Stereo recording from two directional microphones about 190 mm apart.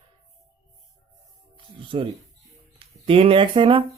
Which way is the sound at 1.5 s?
25° right (ahead or behind).